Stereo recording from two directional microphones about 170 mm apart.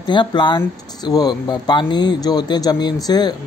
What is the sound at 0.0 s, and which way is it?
Speech, 25° left (ahead or behind).